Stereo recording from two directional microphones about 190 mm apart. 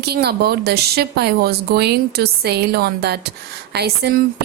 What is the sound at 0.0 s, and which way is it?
A woman's voice, 60° right (ahead or behind).